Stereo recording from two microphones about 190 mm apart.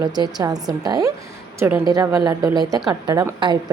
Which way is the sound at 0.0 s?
20° right (ahead or behind).